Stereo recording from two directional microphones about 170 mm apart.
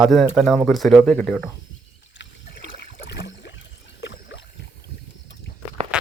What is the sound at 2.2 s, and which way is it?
Boat, 90° left.